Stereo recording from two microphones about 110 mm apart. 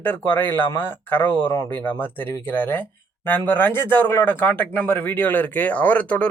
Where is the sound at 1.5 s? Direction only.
30° left (ahead or behind).